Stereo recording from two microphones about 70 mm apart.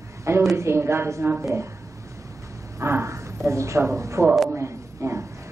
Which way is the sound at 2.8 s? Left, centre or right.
Right.